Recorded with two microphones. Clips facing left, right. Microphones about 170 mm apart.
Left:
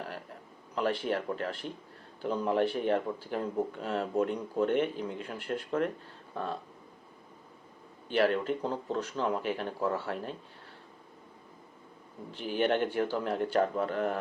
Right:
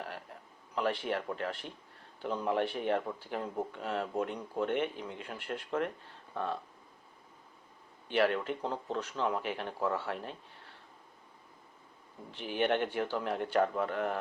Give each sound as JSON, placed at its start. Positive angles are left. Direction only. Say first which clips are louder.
{"t": 0.8, "sound": "speech", "louder": "left 2 dB", "side_deg": 40}
{"t": 8.0, "sound": "speech", "louder": "left 2 dB", "side_deg": 35}
{"t": 12.4, "sound": "speech", "louder": "left 2 dB", "side_deg": 35}